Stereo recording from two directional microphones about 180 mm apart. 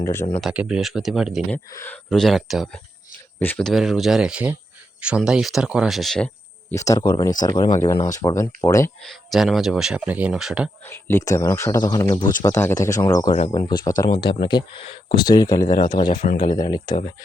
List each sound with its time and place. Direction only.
0.0 s speech: 15° left (ahead or behind)
0.4 s speech: 5° right (ahead or behind)
1.5 s speech: 10° left (ahead or behind)
9.0 s speech: centre (ahead or behind)
10.8 s speech: 15° left (ahead or behind)
13.3 s speech: 30° left (ahead or behind)
16.2 s speech: 50° left (ahead or behind)
16.6 s speech: 20° left (ahead or behind)